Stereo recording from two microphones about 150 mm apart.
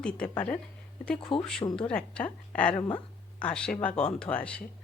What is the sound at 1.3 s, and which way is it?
Speech, 35° left (ahead or behind).